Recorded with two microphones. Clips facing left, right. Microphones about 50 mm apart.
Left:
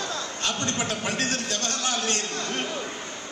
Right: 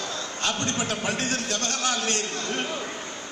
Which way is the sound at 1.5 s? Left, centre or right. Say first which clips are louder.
Right 1 dB; right.